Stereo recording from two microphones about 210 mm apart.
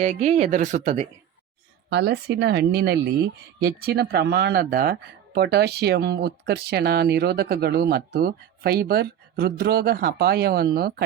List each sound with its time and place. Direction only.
0.0 s speech: 30° right (ahead or behind)
1.9 s speech: 50° right (ahead or behind)